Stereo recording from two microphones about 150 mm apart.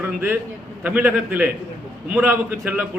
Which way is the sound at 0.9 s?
10° right (ahead or behind).